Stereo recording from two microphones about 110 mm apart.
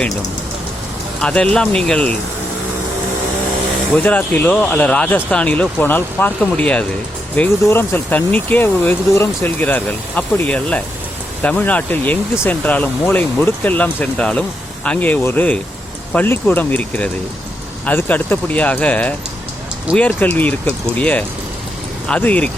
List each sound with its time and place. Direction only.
1.2 s speech: 10° left (ahead or behind)
3.9 s speech: 15° left (ahead or behind)
7.6 s speech: 20° left (ahead or behind)